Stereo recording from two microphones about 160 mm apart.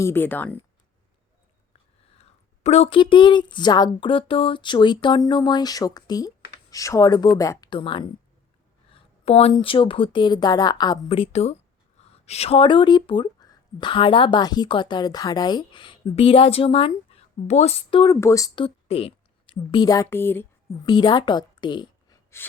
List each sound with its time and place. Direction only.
0.0 s speech: 15° left (ahead or behind)
2.6 s speech: 40° left (ahead or behind); by 7.7 s 20° left (ahead or behind)
7.7 s speech: 30° left (ahead or behind)
18.1 s a woman's voice: 20° left (ahead or behind)
20.8 s speech: 30° left (ahead or behind)
22.4 s gasp: 15° left (ahead or behind)